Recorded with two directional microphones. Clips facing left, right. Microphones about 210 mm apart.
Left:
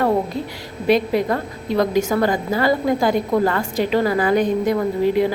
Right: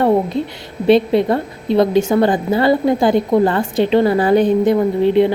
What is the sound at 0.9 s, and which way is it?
A woman's voice, 25° right (ahead or behind).